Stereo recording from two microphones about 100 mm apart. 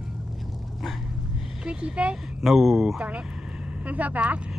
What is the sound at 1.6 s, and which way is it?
Speech, 10° right (ahead or behind).